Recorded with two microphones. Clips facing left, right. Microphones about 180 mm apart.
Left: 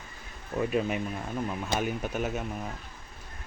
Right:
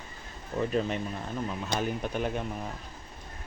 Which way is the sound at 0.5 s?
10° left (ahead or behind).